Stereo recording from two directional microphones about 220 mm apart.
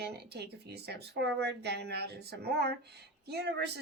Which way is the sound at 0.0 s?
50° right (ahead or behind).